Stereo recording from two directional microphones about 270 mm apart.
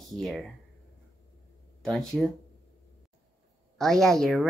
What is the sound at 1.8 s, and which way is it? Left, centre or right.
Speech, centre.